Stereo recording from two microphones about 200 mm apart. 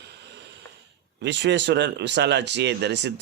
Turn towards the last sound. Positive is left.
turn(degrees=-60)  # may be behind; listen again after turning